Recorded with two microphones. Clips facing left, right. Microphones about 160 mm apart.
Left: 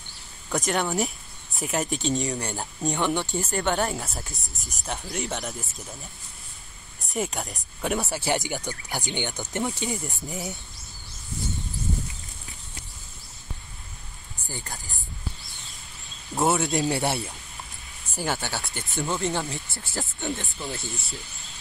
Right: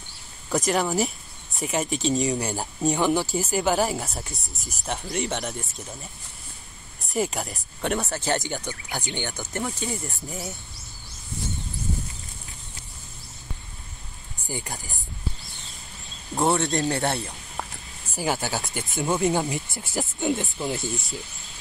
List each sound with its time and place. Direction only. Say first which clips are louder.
0.5 s speech: right 2 dB; centre (ahead or behind); by 9.8 s 20° left (ahead or behind)
10.3 s speech: left 2 dB; centre (ahead or behind)
14.5 s speech: right 4 dB; 15° right (ahead or behind)
16.3 s speech: right 1 dB; 5° left (ahead or behind)
17.6 s a sound: right 11 dB; 90° right
18.1 s speech: right 3 dB; 10° right (ahead or behind)